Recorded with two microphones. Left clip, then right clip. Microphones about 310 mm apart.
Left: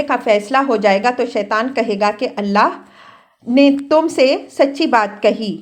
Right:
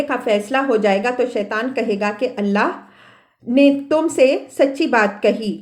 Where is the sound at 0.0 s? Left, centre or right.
Left.